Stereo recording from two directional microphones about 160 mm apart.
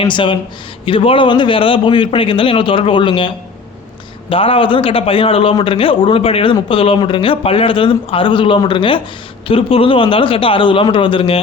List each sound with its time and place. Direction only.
0.0 s a man's voice: 30° left (ahead or behind)